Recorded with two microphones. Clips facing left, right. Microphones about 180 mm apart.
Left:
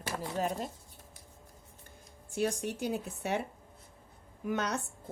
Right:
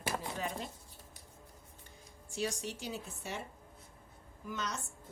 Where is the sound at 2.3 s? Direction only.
55° left (ahead or behind).